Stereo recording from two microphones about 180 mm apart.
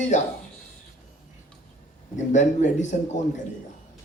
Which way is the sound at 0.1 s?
45° left (ahead or behind).